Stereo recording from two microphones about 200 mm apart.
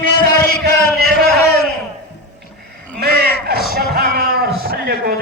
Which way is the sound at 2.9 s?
50° right (ahead or behind).